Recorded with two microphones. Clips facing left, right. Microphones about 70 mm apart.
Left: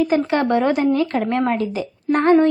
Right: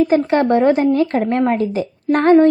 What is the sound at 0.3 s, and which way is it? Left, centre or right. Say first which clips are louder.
A woman's voice: right 4 dB; right.